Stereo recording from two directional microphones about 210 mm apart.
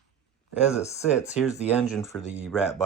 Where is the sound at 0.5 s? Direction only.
5° right (ahead or behind).